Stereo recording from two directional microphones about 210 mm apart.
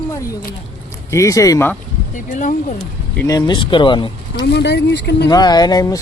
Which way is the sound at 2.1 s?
35° left (ahead or behind).